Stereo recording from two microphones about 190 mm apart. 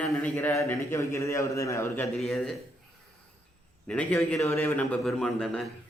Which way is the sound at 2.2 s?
Centre (ahead or behind).